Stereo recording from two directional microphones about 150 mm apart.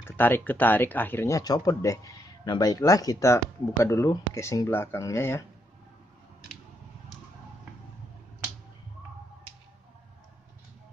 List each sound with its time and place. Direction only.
0.0 s speech: 15° left (ahead or behind)